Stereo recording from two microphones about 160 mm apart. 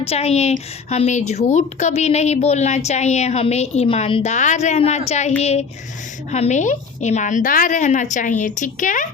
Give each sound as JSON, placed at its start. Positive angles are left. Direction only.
{"t": 0.0, "sound": "a woman's voice", "side_deg": 40}